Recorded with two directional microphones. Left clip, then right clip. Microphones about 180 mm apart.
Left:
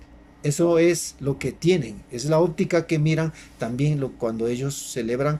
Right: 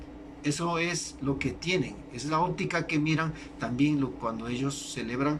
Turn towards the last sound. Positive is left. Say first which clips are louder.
# left 6 dB
turn(degrees=40)  # may be behind; listen again after turning